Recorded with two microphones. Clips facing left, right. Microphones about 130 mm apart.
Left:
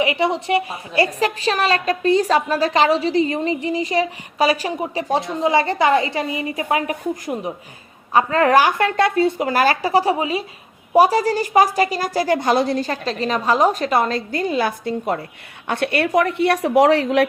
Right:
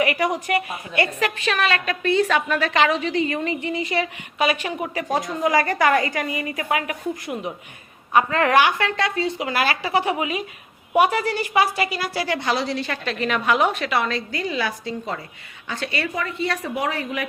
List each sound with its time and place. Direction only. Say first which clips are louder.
0.0 s a woman's voice: left 2 dB; 25° left (ahead or behind); by 17.2 s 80° left